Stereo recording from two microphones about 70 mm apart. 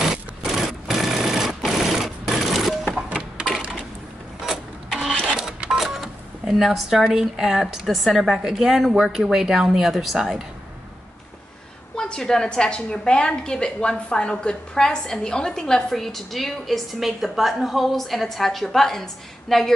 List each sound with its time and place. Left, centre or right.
0.1 s sewing machine: centre
2.9 s printer: centre
4.5 s vehicle: centre
5.2 s cash register: centre
5.6 s a woman's voice: centre
11.9 s a woman's voice: centre